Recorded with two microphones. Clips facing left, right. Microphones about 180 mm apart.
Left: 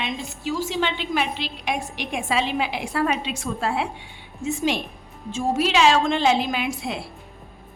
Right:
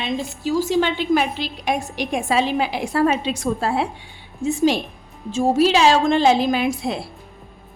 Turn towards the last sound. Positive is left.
turn(degrees=-35)  # may be behind; listen again after turning